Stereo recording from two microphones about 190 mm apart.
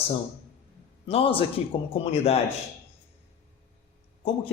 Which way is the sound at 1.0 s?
30° left (ahead or behind).